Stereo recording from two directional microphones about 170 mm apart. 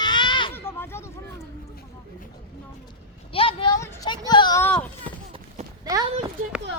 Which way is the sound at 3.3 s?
35° left (ahead or behind).